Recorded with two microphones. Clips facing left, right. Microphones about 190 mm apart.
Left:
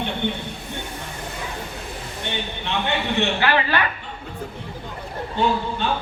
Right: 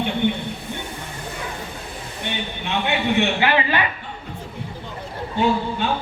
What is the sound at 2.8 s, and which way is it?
A man's voice, 15° right (ahead or behind).